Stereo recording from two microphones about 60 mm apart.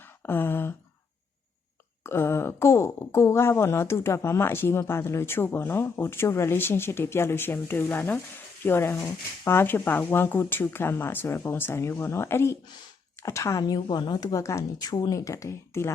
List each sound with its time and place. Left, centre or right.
0.2 s a sound: left
2.0 s speech: left
13.2 s speech: left